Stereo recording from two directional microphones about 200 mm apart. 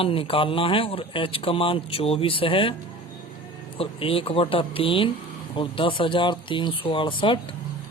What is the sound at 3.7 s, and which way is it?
A man's voice, 30° left (ahead or behind).